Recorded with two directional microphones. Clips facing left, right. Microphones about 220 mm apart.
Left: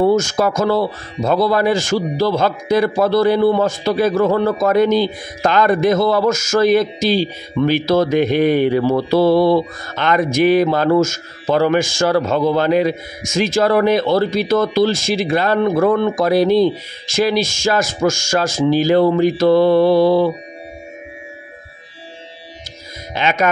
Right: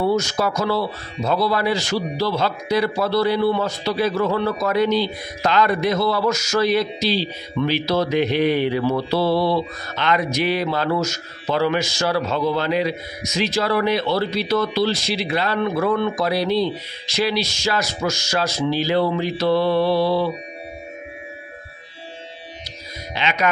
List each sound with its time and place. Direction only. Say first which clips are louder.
0.0 s speech: left 5 dB; 50° left (ahead or behind)
23.1 s speech: left 4 dB; 45° left (ahead or behind)